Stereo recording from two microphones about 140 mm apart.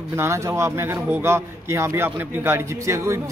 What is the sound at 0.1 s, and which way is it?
A man's voice, 20° right (ahead or behind).